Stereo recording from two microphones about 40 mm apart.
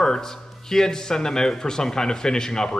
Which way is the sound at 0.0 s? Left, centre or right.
Centre.